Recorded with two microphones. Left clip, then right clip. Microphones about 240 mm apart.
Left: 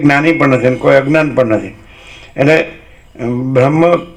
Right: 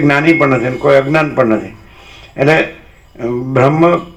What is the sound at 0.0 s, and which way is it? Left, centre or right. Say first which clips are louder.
A man's voice: even; left.